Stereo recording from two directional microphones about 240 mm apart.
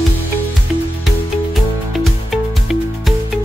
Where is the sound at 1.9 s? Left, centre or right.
Centre.